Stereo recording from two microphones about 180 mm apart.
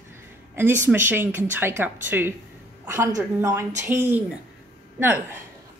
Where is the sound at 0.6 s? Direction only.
10° right (ahead or behind).